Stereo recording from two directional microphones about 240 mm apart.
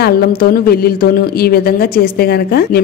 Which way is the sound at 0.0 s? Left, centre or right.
Left.